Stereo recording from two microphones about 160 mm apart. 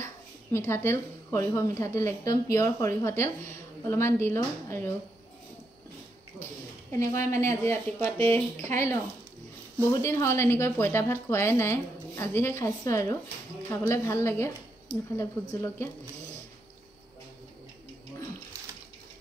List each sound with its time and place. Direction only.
0.0 s a woman's voice: 15° left (ahead or behind)
6.9 s a woman's voice: 20° left (ahead or behind)